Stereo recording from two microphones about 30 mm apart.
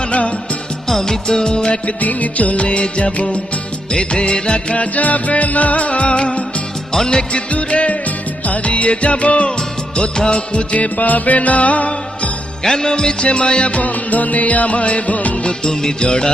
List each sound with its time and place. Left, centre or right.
1.0 s music: centre
2.0 s music: left
4.1 s music of bollywood: left
4.7 s music: left
5.0 s music: left
7.7 s music of bollywood: left
8.4 s music: left
10.0 s music of bollywood: left
10.9 s music: left
12.6 s music: centre
13.2 s music of bollywood: left
13.7 s music: left
16.0 s music of bollywood: left